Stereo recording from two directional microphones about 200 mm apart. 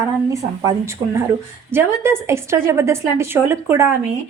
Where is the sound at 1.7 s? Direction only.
10° right (ahead or behind).